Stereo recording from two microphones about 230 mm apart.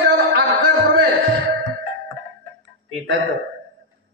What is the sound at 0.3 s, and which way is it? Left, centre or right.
Music, right.